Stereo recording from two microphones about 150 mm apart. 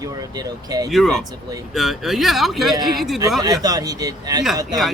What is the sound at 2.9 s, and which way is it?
Speech, centre (ahead or behind).